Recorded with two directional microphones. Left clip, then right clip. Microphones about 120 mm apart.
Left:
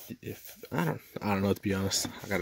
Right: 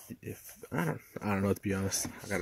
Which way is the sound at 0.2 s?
15° left (ahead or behind).